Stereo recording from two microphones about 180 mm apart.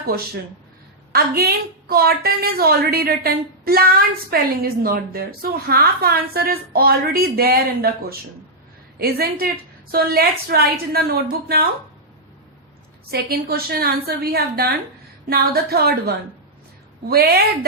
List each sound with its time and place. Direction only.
1.1 s a woman's voice: 60° right (ahead or behind)
13.1 s a woman's voice: 60° right (ahead or behind)